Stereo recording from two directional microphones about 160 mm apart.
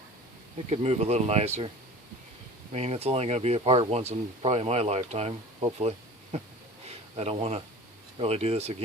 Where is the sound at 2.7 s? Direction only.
40° right (ahead or behind).